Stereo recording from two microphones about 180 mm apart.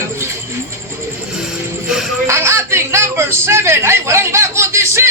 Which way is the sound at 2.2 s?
15° right (ahead or behind).